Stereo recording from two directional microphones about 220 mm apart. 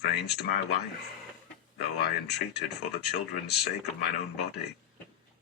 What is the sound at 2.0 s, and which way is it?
A man's voice, 50° left (ahead or behind).